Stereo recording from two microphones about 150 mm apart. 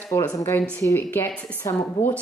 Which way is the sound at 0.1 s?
20° left (ahead or behind).